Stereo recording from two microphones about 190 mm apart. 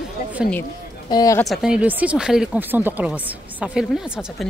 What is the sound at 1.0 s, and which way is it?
Speech, 20° left (ahead or behind).